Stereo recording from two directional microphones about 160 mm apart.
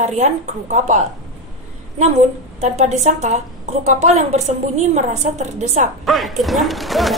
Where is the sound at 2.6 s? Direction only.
45° right (ahead or behind).